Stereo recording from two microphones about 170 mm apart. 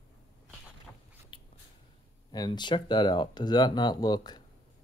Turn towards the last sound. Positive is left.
turn(degrees=25)  # may be behind; listen again after turning